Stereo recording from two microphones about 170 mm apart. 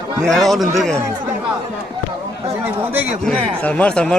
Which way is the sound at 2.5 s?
10° right (ahead or behind).